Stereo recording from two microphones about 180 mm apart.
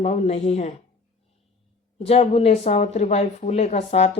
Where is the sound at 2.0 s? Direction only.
35° left (ahead or behind).